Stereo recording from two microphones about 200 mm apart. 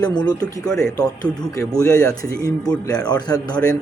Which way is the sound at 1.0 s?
15° left (ahead or behind).